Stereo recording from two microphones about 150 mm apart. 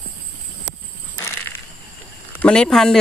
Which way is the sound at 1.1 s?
15° left (ahead or behind).